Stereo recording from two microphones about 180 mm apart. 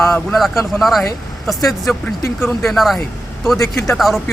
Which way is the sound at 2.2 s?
15° left (ahead or behind).